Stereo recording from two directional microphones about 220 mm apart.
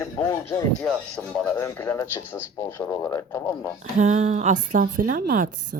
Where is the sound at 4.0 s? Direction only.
30° right (ahead or behind).